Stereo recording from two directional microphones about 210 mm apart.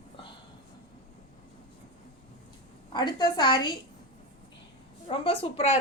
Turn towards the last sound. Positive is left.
turn(degrees=25)  # may be behind; listen again after turning